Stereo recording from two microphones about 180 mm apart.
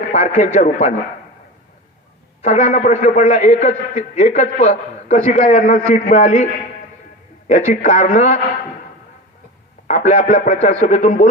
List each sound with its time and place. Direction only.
0.1 s a man's voice: 40° left (ahead or behind)
2.4 s a man's voice: 40° left (ahead or behind)
9.8 s a man's voice: 45° left (ahead or behind)